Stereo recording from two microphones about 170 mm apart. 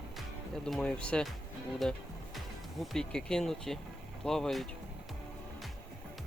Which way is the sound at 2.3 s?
Centre (ahead or behind).